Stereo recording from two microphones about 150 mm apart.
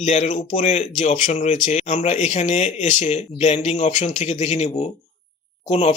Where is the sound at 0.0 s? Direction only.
55° left (ahead or behind).